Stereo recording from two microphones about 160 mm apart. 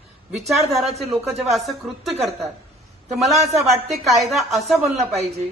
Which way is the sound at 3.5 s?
Centre (ahead or behind).